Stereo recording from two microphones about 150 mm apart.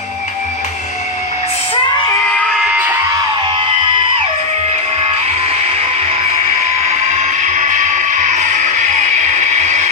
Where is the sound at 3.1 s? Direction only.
35° right (ahead or behind).